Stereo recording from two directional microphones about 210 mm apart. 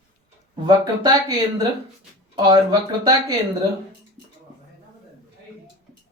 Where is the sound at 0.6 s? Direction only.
20° right (ahead or behind).